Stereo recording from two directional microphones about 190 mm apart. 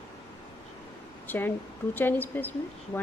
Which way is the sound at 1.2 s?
10° left (ahead or behind).